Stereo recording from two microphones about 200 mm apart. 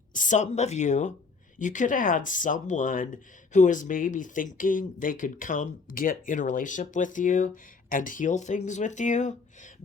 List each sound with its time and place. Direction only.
0.1 s speech: 40° left (ahead or behind)